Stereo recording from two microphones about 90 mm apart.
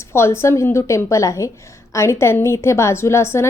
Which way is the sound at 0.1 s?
30° left (ahead or behind).